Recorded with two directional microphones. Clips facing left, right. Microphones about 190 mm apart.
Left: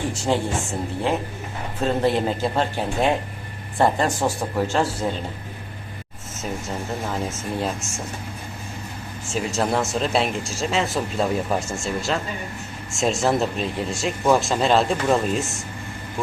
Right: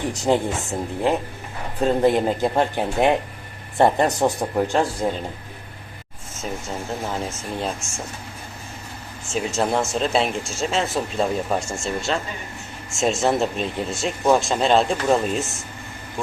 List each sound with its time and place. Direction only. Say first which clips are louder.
0.0 s speech: right 2 dB; 20° right (ahead or behind)
1.8 s speech: right 3 dB; 15° right (ahead or behind)
7.6 s speech: right 1 dB; centre (ahead or behind)
9.3 s speech: right 1 dB; centre (ahead or behind)